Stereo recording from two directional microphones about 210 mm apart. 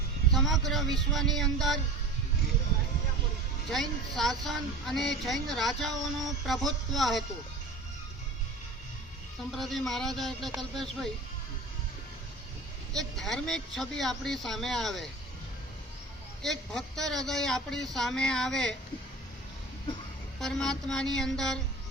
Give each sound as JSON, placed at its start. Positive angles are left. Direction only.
{"t": 0.3, "sound": "speech", "side_deg": 0}
{"t": 3.7, "sound": "speech", "side_deg": 0}
{"t": 9.5, "sound": "speech", "side_deg": 0}
{"t": 12.9, "sound": "speech", "side_deg": 0}
{"t": 16.4, "sound": "speech", "side_deg": 0}
{"t": 20.4, "sound": "speech", "side_deg": 0}